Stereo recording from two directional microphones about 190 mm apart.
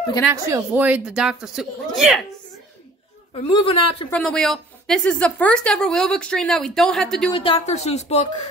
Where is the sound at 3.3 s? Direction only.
25° left (ahead or behind).